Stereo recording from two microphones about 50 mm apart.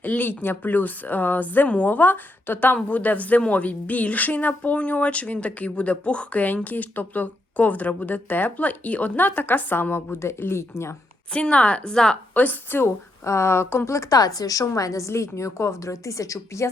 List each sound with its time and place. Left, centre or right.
0.0 s speech: left
6.7 s speech: left
10.4 s a woman's voice: left
11.3 s speech: left
12.3 s speech: left
12.8 s a woman's voice: left